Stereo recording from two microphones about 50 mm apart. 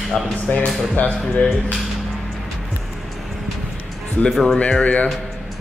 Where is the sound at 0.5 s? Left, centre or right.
Left.